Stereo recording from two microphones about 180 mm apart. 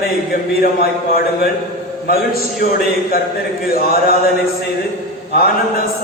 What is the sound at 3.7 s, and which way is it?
Speech, 55° left (ahead or behind).